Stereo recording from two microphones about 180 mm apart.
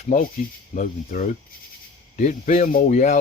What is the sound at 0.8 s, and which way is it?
Speech, 45° left (ahead or behind).